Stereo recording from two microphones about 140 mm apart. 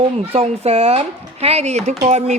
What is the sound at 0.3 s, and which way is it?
A child's voice, 45° right (ahead or behind).